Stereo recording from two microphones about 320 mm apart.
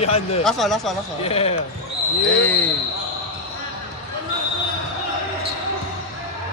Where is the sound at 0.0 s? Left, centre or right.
Centre.